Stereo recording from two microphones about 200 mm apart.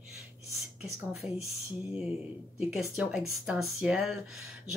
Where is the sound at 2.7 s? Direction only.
5° right (ahead or behind).